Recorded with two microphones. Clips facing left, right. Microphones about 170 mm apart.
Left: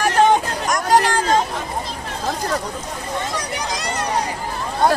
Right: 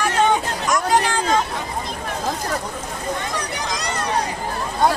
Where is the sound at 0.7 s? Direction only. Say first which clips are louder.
Left 2 dB; 40° left (ahead or behind).